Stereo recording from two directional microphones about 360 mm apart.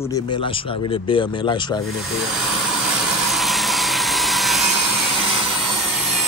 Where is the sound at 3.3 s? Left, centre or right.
Centre.